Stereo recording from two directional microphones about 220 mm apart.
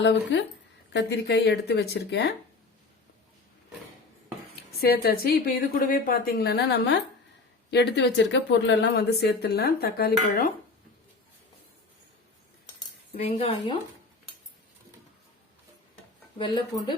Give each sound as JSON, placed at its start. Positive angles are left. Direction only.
{"t": 0.0, "sound": "speech", "side_deg": 55}
{"t": 4.8, "sound": "speech", "side_deg": 45}
{"t": 13.1, "sound": "speech", "side_deg": 25}
{"t": 16.4, "sound": "speech", "side_deg": 20}